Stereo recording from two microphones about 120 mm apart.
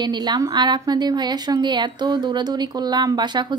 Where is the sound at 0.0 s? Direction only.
35° right (ahead or behind).